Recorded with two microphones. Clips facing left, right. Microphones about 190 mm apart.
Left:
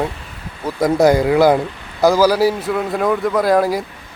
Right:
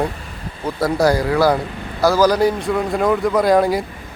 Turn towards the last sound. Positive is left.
turn(degrees=0)  # may be behind; listen again after turning